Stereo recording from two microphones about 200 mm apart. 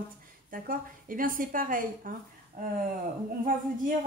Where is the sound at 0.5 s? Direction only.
45° right (ahead or behind).